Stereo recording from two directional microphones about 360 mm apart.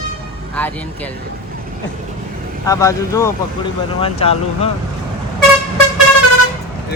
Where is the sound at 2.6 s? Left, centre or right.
Centre.